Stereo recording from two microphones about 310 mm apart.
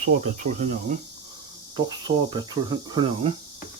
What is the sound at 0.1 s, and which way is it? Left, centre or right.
Speech, right.